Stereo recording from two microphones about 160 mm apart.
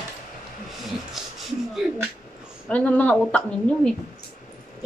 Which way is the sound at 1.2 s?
Centre (ahead or behind).